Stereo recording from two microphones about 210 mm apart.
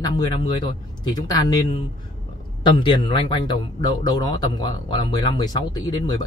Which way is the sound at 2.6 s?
20° left (ahead or behind).